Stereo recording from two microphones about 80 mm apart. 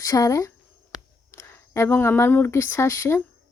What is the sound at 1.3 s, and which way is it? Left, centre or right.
A woman's voice, left.